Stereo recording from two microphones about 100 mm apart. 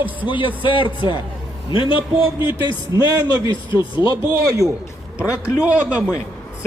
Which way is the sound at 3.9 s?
20° right (ahead or behind).